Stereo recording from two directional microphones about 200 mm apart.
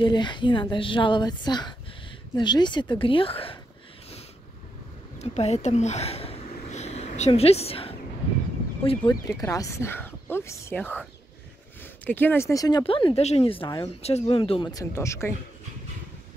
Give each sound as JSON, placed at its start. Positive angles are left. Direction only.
{"t": 0.0, "sound": "speech", "side_deg": 25}
{"t": 5.2, "sound": "a sound", "side_deg": 35}
{"t": 8.8, "sound": "speech", "side_deg": 30}
{"t": 9.3, "sound": "speech", "side_deg": 15}